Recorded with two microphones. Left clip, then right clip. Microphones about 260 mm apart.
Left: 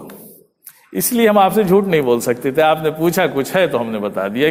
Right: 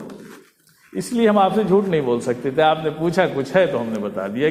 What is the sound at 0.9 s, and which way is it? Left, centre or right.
A man's voice, left.